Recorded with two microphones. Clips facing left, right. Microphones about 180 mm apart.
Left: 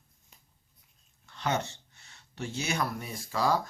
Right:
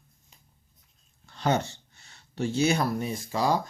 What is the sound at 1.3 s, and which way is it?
Speech, 35° right (ahead or behind).